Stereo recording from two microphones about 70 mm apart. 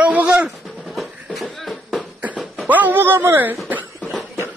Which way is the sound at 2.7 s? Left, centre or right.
Right.